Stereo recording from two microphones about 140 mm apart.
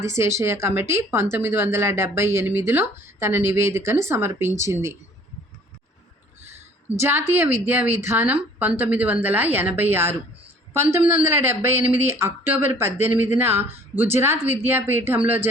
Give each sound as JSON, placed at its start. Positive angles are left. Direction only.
{"t": 0.0, "sound": "speech", "side_deg": -20}
{"t": 7.0, "sound": "a woman's voice", "side_deg": -15}